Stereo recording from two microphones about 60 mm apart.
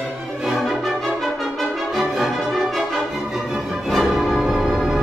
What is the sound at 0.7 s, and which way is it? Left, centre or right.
Music, centre.